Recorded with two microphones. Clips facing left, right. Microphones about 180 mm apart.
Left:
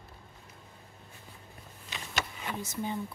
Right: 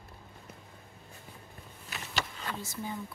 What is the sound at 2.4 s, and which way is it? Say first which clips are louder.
Speech: left 3 dB; 15° left (ahead or behind).